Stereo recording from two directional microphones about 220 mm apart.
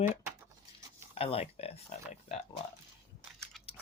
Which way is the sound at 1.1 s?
25° left (ahead or behind).